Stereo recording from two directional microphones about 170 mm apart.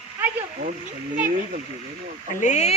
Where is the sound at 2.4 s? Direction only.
40° left (ahead or behind).